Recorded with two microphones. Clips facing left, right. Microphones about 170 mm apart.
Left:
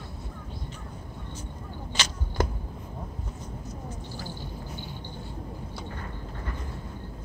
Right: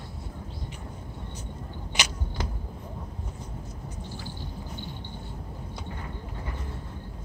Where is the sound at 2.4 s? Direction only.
50° left (ahead or behind).